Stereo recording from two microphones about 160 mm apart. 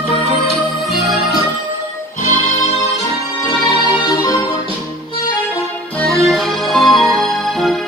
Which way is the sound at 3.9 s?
25° left (ahead or behind).